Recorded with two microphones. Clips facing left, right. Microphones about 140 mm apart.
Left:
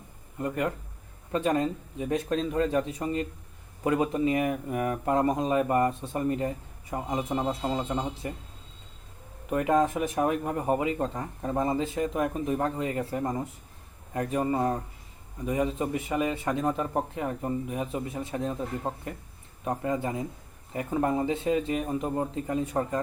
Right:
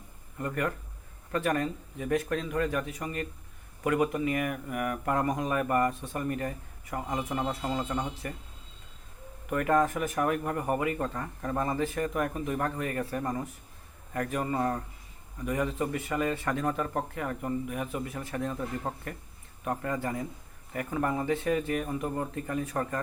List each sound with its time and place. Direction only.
0.3 s speech: 20° left (ahead or behind)
9.5 s speech: 20° left (ahead or behind)